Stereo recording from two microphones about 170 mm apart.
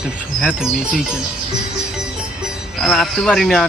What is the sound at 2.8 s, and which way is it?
Speech, centre (ahead or behind).